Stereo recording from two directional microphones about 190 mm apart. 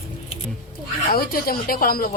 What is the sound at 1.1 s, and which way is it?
Speech, 50° left (ahead or behind).